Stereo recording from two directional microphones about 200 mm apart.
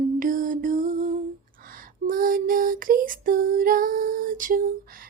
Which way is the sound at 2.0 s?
45° right (ahead or behind).